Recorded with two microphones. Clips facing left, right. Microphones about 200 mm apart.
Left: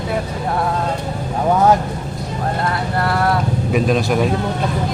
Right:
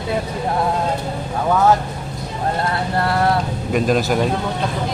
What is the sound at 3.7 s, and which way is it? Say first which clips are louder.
Speech: even; centre (ahead or behind).